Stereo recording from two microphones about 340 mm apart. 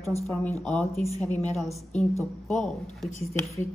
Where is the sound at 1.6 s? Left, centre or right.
Centre.